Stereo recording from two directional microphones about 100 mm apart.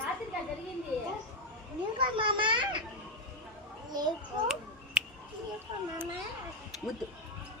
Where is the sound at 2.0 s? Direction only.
55° right (ahead or behind).